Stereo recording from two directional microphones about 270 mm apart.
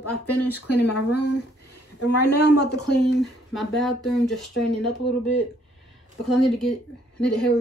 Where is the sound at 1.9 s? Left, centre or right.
Left.